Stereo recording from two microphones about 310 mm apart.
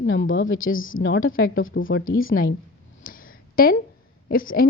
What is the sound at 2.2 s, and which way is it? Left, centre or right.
Speech, left.